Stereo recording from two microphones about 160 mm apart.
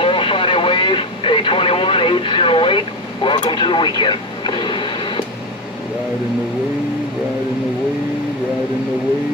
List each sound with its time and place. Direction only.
0.0 s vehicle: 35° left (ahead or behind)
3.4 s radio: 30° left (ahead or behind)